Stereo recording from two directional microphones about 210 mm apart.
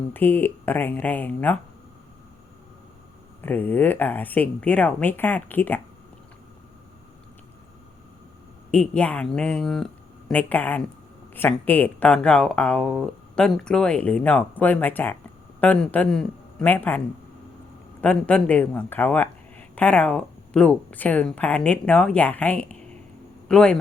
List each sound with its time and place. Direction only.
0.1 s speech: 10° left (ahead or behind)
3.4 s speech: 10° left (ahead or behind)
8.7 s speech: 5° left (ahead or behind)
18.0 s speech: 5° left (ahead or behind)